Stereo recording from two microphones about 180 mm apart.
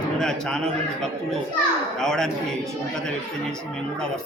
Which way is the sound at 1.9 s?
5° left (ahead or behind).